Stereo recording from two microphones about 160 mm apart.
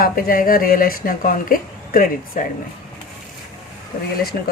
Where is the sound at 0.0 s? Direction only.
60° left (ahead or behind).